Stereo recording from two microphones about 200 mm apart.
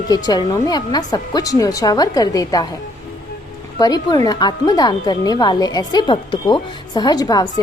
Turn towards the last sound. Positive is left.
turn(degrees=20)  # may be behind; listen again after turning